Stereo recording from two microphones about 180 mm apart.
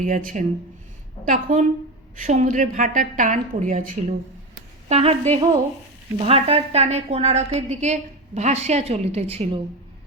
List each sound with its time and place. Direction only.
0.0 s a woman's voice: 45° right (ahead or behind)